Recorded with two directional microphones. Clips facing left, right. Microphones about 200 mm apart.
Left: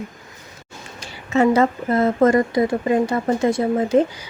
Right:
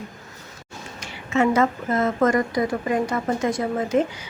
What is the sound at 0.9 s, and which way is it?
A woman's voice, 35° left (ahead or behind).